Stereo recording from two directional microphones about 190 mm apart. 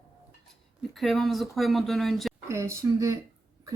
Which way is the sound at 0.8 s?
Centre (ahead or behind).